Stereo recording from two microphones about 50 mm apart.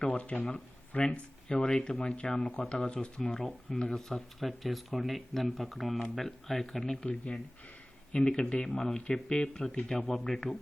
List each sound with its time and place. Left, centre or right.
0.1 s a sound: left
0.3 s speech: centre
3.2 s speech: centre